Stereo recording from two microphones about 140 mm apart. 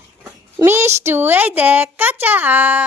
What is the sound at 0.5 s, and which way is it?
A woman's voice, 15° right (ahead or behind).